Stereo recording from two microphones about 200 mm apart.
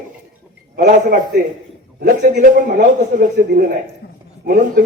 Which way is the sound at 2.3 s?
40° right (ahead or behind).